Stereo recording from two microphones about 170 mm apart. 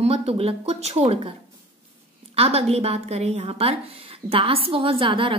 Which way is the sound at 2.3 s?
35° right (ahead or behind).